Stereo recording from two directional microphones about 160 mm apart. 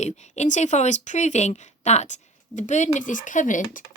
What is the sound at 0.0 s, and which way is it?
A woman's voice, 45° left (ahead or behind).